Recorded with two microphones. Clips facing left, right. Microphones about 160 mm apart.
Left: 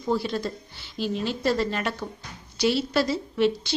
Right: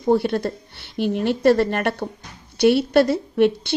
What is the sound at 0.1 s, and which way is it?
A woman's voice, 60° right (ahead or behind).